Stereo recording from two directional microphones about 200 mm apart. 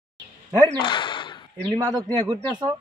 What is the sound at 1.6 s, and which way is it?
Speech, 20° right (ahead or behind).